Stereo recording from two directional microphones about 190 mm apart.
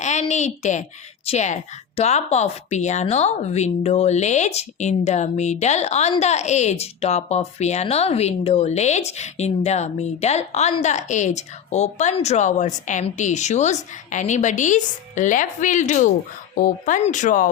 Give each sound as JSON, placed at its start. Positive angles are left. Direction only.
{"t": 0.0, "sound": "a woman's voice", "side_deg": 40}